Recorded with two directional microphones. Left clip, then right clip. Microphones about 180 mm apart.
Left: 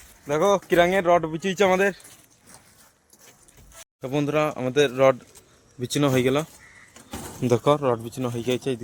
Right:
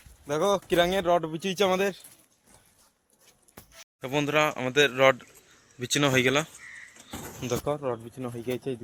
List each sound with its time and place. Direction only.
0.3 s speech: centre (ahead or behind)
4.0 s speech: 5° left (ahead or behind)
7.4 s speech: 70° left (ahead or behind)
7.8 s speech: 40° left (ahead or behind)